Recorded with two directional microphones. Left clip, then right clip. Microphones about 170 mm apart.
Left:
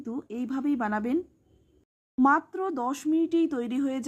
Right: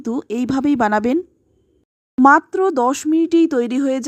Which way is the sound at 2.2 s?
40° right (ahead or behind).